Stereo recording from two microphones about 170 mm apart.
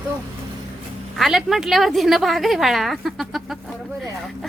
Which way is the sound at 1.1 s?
Centre (ahead or behind).